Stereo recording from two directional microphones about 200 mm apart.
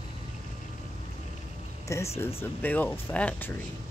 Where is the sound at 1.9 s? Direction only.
15° left (ahead or behind).